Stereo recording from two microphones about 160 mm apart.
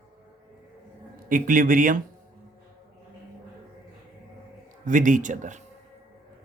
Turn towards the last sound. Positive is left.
turn(degrees=-50)  # may be behind; listen again after turning